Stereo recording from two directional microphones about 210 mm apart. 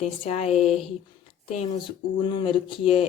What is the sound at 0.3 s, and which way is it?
Speech, 30° left (ahead or behind).